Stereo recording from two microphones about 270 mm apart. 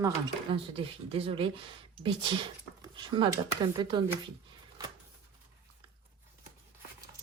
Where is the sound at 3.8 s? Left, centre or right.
Centre.